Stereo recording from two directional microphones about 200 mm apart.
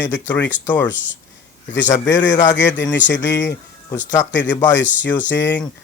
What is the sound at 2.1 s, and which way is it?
Speech, 65° left (ahead or behind).